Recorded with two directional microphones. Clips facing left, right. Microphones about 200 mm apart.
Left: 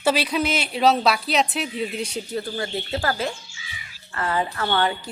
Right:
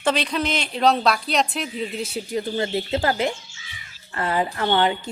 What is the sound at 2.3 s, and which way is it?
A woman's voice, 20° right (ahead or behind).